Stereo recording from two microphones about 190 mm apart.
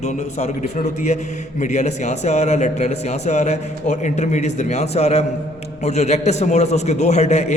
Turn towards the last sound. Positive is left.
turn(degrees=35)  # may be behind; listen again after turning